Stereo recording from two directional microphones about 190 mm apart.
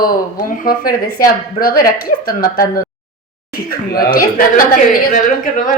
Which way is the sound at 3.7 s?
50° left (ahead or behind).